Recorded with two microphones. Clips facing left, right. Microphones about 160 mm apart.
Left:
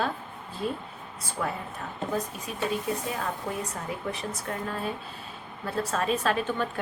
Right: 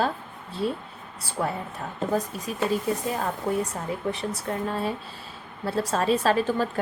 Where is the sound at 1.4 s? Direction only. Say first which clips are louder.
Right 3 dB; 35° right (ahead or behind).